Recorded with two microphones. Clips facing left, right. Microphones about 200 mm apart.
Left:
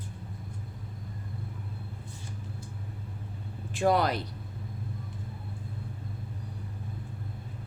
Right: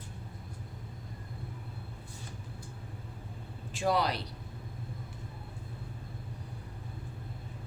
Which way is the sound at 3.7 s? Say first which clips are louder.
Left 4 dB; 55° left (ahead or behind).